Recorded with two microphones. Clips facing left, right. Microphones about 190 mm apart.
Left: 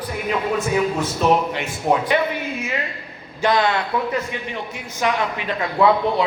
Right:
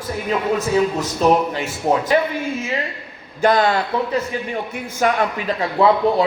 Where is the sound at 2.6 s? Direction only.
25° right (ahead or behind).